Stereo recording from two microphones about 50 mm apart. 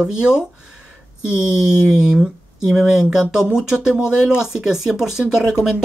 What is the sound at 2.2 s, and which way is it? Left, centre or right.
Speech, centre.